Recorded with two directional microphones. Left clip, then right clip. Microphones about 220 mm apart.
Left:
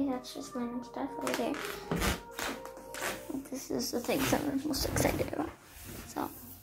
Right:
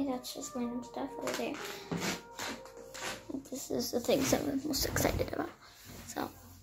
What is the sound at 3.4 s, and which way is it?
Speech, 10° right (ahead or behind).